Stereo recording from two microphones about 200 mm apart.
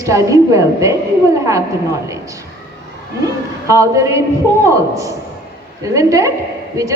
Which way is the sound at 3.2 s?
15° right (ahead or behind).